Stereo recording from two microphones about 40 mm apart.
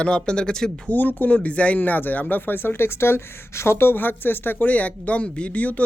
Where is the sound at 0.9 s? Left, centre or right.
Left.